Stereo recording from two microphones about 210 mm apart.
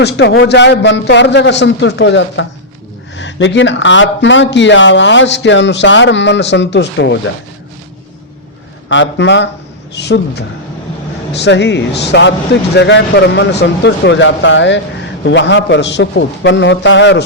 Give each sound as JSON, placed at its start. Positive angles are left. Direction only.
{"t": 0.0, "sound": "speech", "side_deg": 55}
{"t": 8.9, "sound": "speech", "side_deg": 60}